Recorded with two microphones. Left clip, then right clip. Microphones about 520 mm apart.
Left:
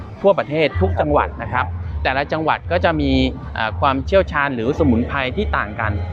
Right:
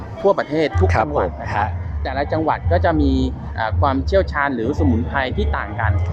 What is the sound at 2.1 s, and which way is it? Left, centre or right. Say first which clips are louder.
Speech: left 2 dB; left.